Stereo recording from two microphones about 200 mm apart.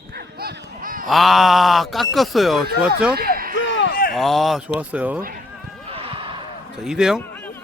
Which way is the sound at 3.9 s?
45° left (ahead or behind).